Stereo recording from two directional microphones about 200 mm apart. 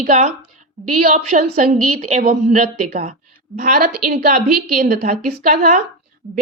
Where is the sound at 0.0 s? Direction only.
35° right (ahead or behind).